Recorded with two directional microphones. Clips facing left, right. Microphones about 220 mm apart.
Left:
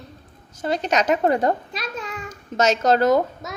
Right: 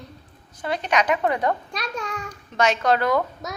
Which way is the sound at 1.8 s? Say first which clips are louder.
Right 1 dB; 5° left (ahead or behind).